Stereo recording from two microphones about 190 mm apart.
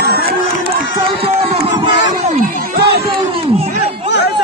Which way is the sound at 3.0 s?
30° right (ahead or behind).